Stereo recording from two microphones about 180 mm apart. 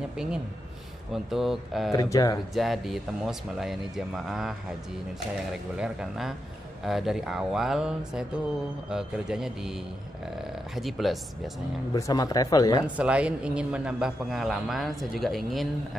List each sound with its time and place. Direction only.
1.1 s a man's voice: centre (ahead or behind)
1.9 s speech: 20° left (ahead or behind)
2.5 s a man's voice: centre (ahead or behind)
10.8 s a man's voice: centre (ahead or behind)
11.9 s speech: 20° left (ahead or behind)
12.8 s a man's voice: 5° right (ahead or behind)